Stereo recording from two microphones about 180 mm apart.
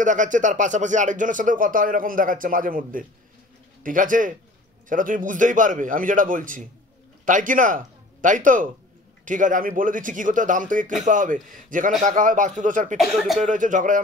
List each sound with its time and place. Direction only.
0.0 s speech: 45° right (ahead or behind)
12.9 s speech: centre (ahead or behind)
13.4 s speech: 45° right (ahead or behind)